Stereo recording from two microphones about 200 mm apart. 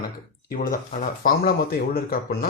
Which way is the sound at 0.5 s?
45° left (ahead or behind).